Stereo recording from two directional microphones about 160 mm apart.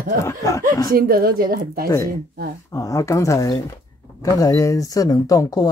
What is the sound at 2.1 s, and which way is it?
Speech, 85° right.